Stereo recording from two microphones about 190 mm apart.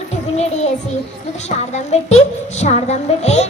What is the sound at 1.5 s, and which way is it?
A woman's voice, 35° left (ahead or behind).